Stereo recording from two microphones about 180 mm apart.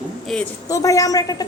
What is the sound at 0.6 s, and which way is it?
Speech, 20° left (ahead or behind).